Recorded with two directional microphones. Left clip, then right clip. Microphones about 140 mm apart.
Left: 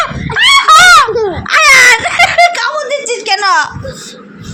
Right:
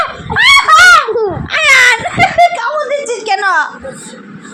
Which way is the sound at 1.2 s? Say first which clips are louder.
Left 4 dB; 10° left (ahead or behind).